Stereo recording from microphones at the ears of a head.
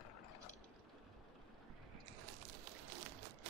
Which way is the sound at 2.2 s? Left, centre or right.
Right.